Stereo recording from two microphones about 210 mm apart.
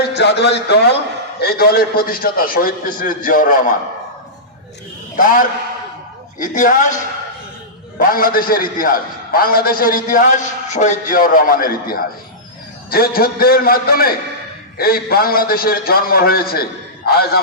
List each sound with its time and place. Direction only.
0.1 s a man's voice: 55° left (ahead or behind)
5.1 s a man's voice: 40° left (ahead or behind)
7.9 s a man's voice: 45° left (ahead or behind)